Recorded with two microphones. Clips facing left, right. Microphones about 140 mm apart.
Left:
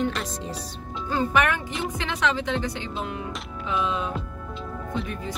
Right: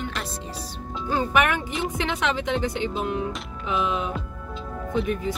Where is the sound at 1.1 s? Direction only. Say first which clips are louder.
Right 1 dB; 15° right (ahead or behind).